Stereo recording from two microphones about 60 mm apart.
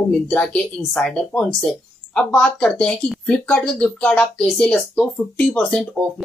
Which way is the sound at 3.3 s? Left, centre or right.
Centre.